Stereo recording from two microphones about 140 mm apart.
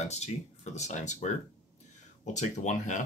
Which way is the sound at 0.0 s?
50° left (ahead or behind).